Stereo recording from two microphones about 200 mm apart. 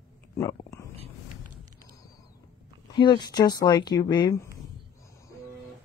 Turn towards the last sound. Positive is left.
turn(degrees=20)  # may be behind; listen again after turning